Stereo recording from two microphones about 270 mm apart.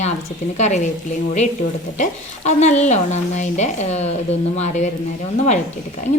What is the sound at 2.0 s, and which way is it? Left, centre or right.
A woman's voice, left.